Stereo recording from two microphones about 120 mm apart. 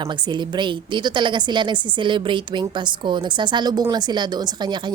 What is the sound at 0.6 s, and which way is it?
A woman's voice, 40° right (ahead or behind).